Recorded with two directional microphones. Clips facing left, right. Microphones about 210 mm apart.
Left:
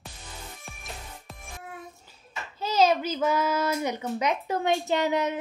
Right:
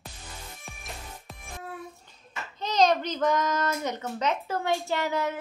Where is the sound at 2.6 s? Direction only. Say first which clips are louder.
Left 1 dB; 5° left (ahead or behind).